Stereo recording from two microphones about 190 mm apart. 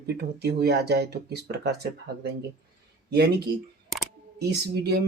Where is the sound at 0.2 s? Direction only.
60° right (ahead or behind).